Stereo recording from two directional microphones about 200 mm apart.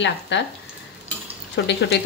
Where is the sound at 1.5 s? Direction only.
60° left (ahead or behind).